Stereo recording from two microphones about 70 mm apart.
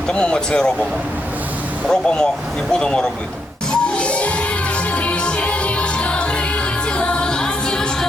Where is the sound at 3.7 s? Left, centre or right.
Centre.